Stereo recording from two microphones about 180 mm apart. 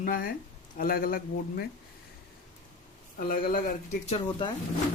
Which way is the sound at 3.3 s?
55° left (ahead or behind).